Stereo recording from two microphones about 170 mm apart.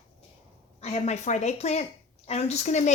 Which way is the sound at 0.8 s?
40° left (ahead or behind).